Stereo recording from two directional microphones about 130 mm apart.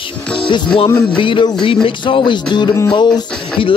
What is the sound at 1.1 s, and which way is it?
Speech, 40° left (ahead or behind).